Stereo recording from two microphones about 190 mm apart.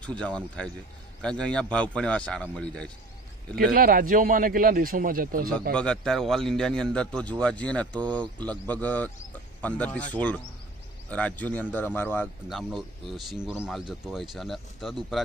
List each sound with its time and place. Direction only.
0.0 s a man's voice: 5° left (ahead or behind)
3.5 s a man's voice: 50° right (ahead or behind)
5.7 s a man's voice: 5° left (ahead or behind)
12.4 s a man's voice: centre (ahead or behind)